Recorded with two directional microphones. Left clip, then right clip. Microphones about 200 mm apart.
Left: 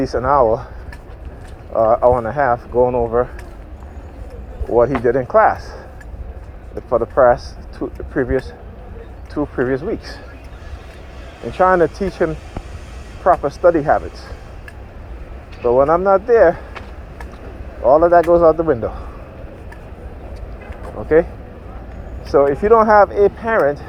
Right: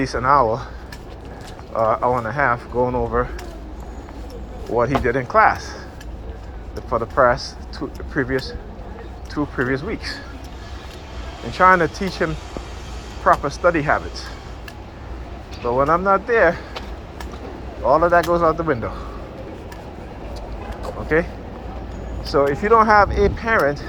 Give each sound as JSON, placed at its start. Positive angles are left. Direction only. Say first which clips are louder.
{"t": 0.0, "sound": "speech", "louder": "left 3 dB", "side_deg": 25}
{"t": 0.3, "sound": "speech", "louder": "left 2 dB", "side_deg": 45}
{"t": 1.7, "sound": "speech", "louder": "left 5 dB", "side_deg": 40}
{"t": 5.0, "sound": "speech", "louder": "left 5 dB", "side_deg": 25}
{"t": 6.9, "sound": "speech", "louder": "left 4 dB", "side_deg": 40}
{"t": 11.5, "sound": "speech", "louder": "left 1 dB", "side_deg": 35}
{"t": 15.6, "sound": "speech", "louder": "left 4 dB", "side_deg": 40}
{"t": 17.8, "sound": "speech", "louder": "left 4 dB", "side_deg": 40}
{"t": 22.2, "sound": "speech", "louder": "left 4 dB", "side_deg": 40}